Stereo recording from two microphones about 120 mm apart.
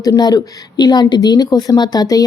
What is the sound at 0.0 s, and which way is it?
A woman's voice, 30° left (ahead or behind).